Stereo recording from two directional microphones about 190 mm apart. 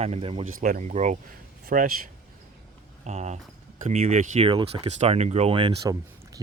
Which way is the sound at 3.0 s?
35° right (ahead or behind).